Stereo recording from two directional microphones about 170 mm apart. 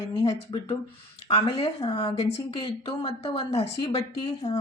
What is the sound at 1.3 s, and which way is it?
Speech, 35° left (ahead or behind).